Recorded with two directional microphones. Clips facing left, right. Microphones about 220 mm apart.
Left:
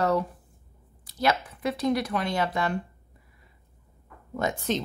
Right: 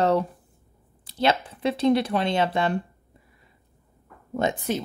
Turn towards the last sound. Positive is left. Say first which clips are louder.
# right 1 dB
turn(degrees=-10)  # may be behind; listen again after turning